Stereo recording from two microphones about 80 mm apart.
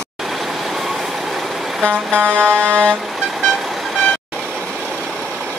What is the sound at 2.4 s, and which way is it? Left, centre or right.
Vehicle, centre.